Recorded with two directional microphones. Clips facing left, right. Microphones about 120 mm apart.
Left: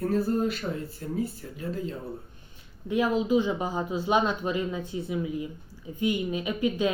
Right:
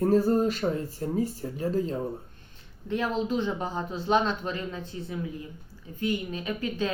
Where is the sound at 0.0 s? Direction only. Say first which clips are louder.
Right 3 dB; 40° right (ahead or behind).